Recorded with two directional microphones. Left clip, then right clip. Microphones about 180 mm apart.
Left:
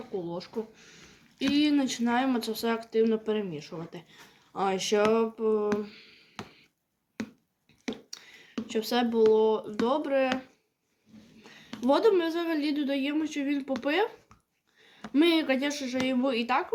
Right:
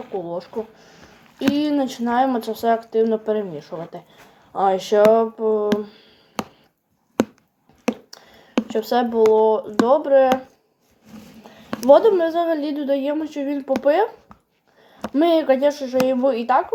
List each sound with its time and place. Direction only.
0.3 s speech: 30° left (ahead or behind)
8.6 s speech: 30° left (ahead or behind)
11.9 s speech: 30° left (ahead or behind)
15.1 s speech: 30° left (ahead or behind)